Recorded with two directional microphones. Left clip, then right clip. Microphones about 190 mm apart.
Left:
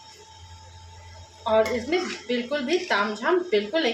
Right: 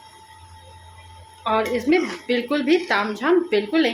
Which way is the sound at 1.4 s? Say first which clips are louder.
Right 2 dB; 40° right (ahead or behind).